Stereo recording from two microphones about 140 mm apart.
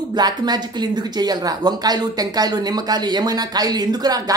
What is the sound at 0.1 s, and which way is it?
Speech, 30° right (ahead or behind).